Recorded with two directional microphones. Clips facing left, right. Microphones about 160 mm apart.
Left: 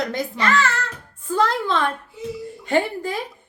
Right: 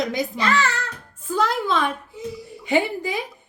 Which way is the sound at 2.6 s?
10° right (ahead or behind).